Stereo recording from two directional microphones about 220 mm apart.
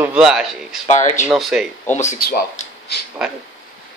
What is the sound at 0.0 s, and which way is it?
Speech, 5° right (ahead or behind).